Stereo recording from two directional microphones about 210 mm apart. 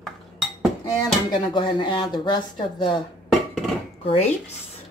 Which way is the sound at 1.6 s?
25° left (ahead or behind).